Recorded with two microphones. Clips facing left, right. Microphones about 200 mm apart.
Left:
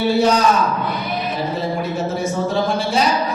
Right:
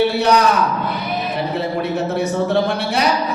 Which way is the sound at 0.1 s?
65° right (ahead or behind).